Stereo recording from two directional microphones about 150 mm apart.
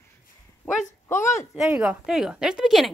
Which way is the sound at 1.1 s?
15° left (ahead or behind).